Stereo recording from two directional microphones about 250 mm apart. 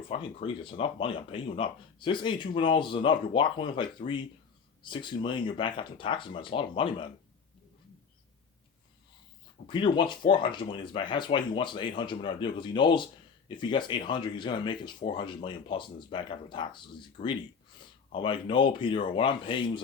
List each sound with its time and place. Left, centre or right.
0.1 s speech: left
9.6 s speech: centre